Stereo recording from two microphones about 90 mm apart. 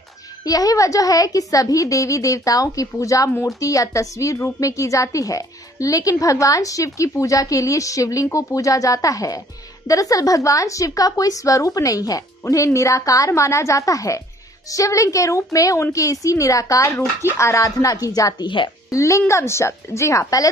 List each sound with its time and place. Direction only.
0.5 s a woman's voice: 45° left (ahead or behind)